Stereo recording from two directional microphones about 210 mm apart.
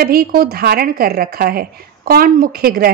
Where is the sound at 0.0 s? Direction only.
45° right (ahead or behind).